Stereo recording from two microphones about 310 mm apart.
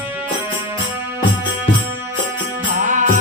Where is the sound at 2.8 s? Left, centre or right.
Right.